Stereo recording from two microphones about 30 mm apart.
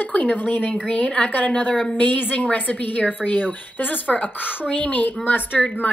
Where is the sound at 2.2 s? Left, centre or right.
Left.